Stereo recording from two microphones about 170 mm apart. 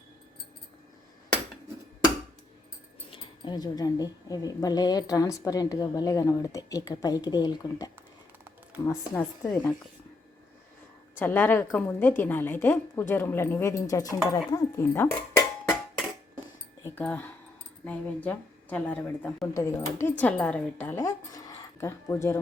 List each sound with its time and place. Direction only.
3.1 s speech: 25° left (ahead or behind)
11.2 s speech: 10° left (ahead or behind)
16.8 s speech: 10° left (ahead or behind)